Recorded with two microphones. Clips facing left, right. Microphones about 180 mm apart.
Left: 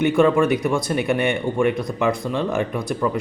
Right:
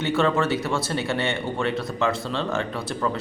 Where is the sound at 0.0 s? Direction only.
15° left (ahead or behind).